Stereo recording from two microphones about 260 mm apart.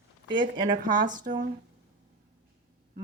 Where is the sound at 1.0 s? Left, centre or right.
Right.